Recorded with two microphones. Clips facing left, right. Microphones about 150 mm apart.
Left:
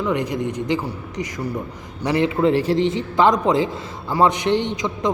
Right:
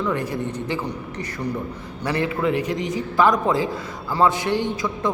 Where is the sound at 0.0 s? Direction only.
15° left (ahead or behind).